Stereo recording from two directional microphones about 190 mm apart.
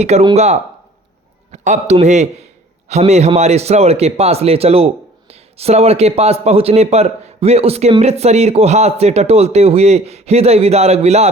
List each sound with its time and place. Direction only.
0.0 s a man's voice: 35° right (ahead or behind)